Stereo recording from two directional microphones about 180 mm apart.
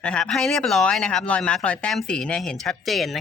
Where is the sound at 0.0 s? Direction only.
5° left (ahead or behind).